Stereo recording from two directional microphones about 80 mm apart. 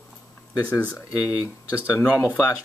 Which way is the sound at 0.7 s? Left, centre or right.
Centre.